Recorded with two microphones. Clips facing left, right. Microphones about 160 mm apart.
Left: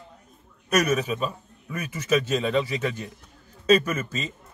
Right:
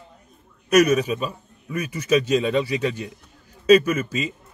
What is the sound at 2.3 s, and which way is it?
Speech, 15° right (ahead or behind).